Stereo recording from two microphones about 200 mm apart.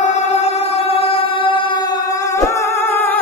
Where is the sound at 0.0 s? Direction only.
35° left (ahead or behind).